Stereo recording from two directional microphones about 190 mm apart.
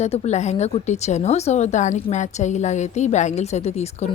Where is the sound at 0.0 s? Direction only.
35° left (ahead or behind).